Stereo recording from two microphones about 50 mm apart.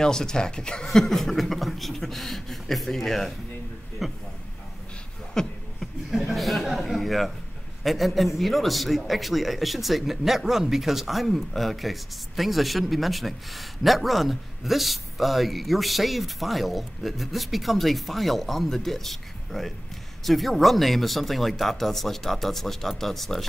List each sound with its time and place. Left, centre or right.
0.0 s speech: centre
5.3 s beatboxing: centre
6.0 s chuckle: centre
7.8 s speech: centre